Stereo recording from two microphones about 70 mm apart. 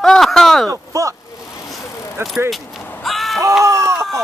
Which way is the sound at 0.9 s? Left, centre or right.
Right.